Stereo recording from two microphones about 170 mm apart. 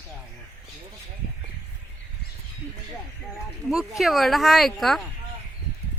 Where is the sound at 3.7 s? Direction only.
Centre (ahead or behind).